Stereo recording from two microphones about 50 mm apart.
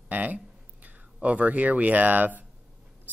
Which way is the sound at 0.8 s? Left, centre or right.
Right.